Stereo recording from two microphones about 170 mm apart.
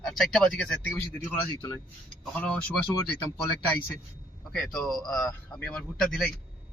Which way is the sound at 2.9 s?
20° left (ahead or behind).